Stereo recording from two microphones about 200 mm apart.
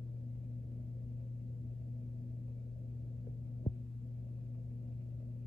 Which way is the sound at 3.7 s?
35° left (ahead or behind).